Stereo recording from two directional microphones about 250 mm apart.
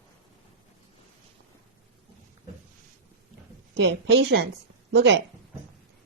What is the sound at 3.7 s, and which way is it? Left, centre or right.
A woman's voice, right.